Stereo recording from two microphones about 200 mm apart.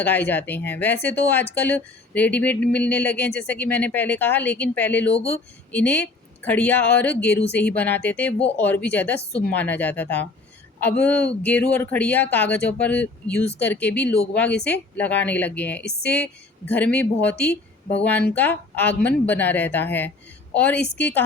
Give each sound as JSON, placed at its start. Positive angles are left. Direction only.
{"t": 0.0, "sound": "speech", "side_deg": 10}
{"t": 15.8, "sound": "speech", "side_deg": 55}
{"t": 16.1, "sound": "speech", "side_deg": 5}